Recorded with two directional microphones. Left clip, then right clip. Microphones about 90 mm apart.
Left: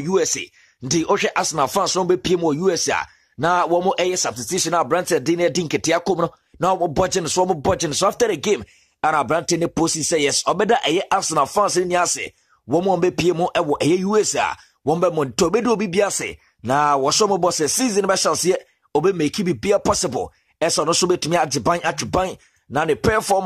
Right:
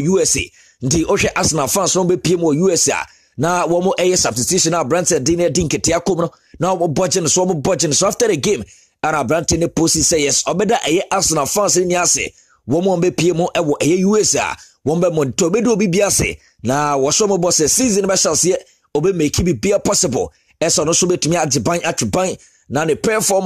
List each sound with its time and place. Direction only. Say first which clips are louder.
0.0 s speech: right 4 dB; 30° right (ahead or behind)
2.4 s a man's voice: right 4 dB; 25° right (ahead or behind)
2.7 s speech: right 4 dB; 40° right (ahead or behind)
6.2 s a man's voice: right 1 dB; 30° right (ahead or behind)
7.7 s speech: right 4 dB; 35° right (ahead or behind)
14.9 s a man's voice: right 3 dB; 30° right (ahead or behind)
16.0 s speech: right 4 dB; 45° right (ahead or behind)
17.0 s speech: right 2 dB; 30° right (ahead or behind)